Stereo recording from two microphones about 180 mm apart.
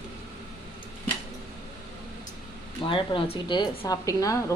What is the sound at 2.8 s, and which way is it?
A woman's voice, 30° left (ahead or behind).